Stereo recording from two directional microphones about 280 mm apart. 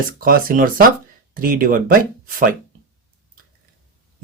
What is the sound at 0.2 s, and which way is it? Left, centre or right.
Speech, right.